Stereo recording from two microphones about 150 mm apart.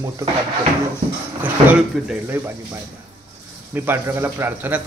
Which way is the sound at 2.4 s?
10° right (ahead or behind).